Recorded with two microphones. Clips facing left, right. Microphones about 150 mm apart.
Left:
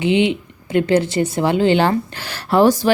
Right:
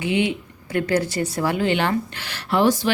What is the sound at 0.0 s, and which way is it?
Speech, 25° left (ahead or behind).